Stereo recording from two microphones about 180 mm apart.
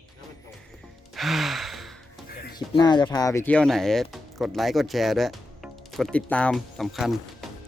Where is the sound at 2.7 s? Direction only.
25° left (ahead or behind).